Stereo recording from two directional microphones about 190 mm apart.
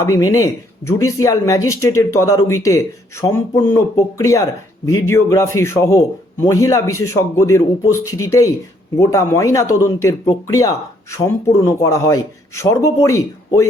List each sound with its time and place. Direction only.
0.0 s speech: 15° left (ahead or behind)